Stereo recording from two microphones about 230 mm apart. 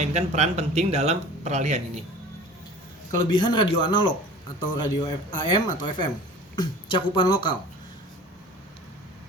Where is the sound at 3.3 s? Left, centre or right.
Centre.